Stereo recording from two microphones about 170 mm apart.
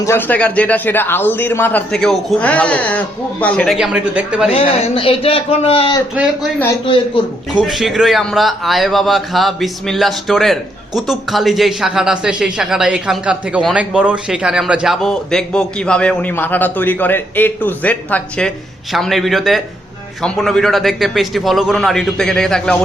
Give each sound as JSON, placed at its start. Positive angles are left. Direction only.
{"t": 0.0, "sound": "a man's voice", "side_deg": 15}
{"t": 3.8, "sound": "speech", "side_deg": -10}
{"t": 4.4, "sound": "a man's voice", "side_deg": 35}
{"t": 7.5, "sound": "a man's voice", "side_deg": 0}